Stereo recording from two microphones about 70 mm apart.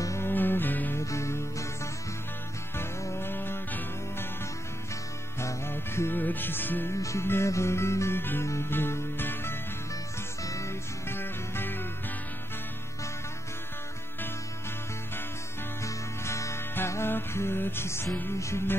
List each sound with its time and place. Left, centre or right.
0.2 s music: left
0.9 s music: left
2.8 s music: left
5.4 s music: left
6.9 s music: left
10.4 s music: left
11.1 s music: left
15.8 s music: left